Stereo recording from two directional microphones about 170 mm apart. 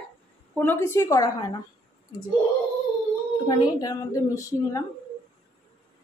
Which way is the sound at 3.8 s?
20° left (ahead or behind).